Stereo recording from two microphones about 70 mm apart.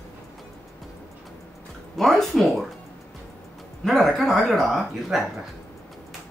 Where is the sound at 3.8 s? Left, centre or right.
Centre.